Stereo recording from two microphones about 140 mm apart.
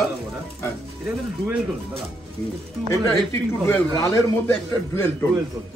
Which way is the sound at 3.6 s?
20° left (ahead or behind).